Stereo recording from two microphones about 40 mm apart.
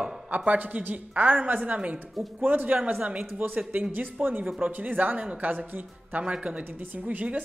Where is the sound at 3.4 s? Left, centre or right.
Right.